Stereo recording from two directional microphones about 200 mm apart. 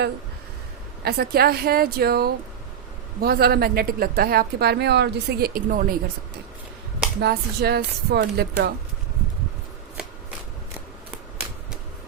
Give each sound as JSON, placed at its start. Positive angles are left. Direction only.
{"t": 1.0, "sound": "a woman's voice", "side_deg": -50}
{"t": 7.2, "sound": "a woman's voice", "side_deg": -55}